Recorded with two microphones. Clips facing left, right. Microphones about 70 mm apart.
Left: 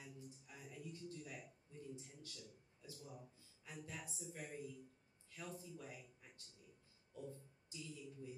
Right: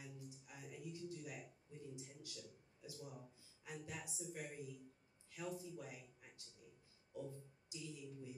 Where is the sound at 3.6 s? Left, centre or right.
Centre.